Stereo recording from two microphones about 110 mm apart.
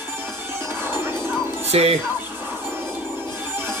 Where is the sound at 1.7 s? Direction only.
70° right (ahead or behind).